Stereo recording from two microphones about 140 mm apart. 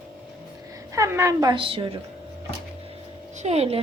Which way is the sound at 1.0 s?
20° right (ahead or behind).